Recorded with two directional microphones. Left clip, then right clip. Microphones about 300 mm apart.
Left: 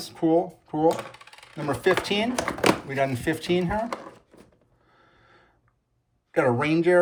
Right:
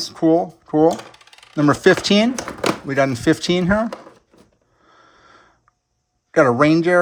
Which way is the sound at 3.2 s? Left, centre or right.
Right.